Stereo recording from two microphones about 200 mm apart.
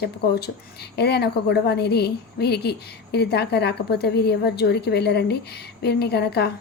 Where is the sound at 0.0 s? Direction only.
55° left (ahead or behind).